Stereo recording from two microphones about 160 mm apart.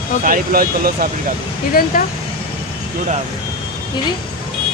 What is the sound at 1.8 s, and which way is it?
Speech, 65° left (ahead or behind).